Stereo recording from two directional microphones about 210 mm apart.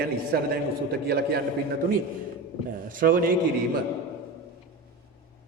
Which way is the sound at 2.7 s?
40° right (ahead or behind).